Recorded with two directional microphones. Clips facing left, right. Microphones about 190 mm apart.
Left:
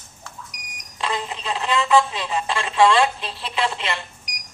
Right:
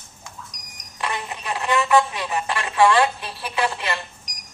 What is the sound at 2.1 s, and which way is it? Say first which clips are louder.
Speech: left 1 dB; 25° left (ahead or behind).